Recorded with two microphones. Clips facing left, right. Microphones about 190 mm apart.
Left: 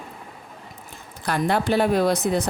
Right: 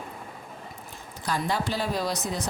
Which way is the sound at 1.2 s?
60° left (ahead or behind).